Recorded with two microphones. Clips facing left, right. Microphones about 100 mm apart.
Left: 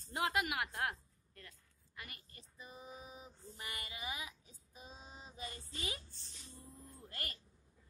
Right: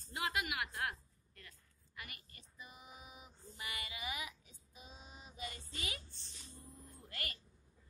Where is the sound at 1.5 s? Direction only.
35° left (ahead or behind).